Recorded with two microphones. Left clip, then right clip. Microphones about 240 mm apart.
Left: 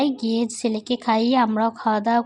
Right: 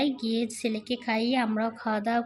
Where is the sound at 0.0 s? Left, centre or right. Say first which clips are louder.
Left 6 dB; centre.